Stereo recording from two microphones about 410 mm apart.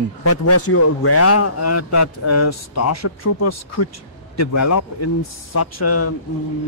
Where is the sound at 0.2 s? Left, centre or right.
Left.